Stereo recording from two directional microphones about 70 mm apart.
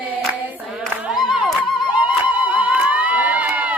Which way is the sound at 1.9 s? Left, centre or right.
Right.